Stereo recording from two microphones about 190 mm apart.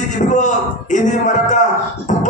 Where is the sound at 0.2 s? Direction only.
40° left (ahead or behind).